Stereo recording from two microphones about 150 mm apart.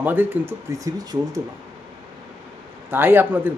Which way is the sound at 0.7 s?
25° right (ahead or behind).